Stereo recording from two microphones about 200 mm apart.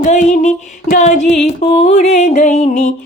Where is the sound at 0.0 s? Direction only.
35° left (ahead or behind).